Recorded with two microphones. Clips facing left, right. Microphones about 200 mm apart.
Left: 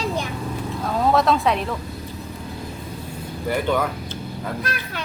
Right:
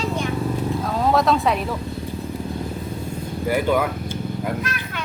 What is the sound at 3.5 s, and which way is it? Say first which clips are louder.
Speech: right 2 dB; 10° right (ahead or behind).